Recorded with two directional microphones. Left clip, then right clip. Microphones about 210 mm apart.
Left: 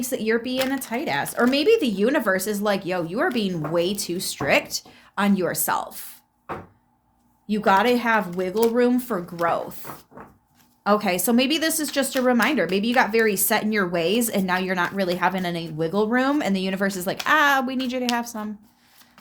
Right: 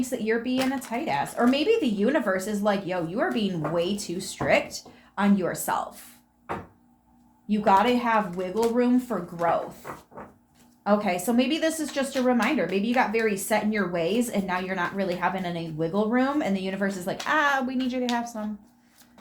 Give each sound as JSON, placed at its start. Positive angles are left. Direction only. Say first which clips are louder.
{"t": 0.1, "sound": "speech", "louder": "left 6 dB", "side_deg": 55}
{"t": 7.4, "sound": "speech", "louder": "left 2 dB", "side_deg": 55}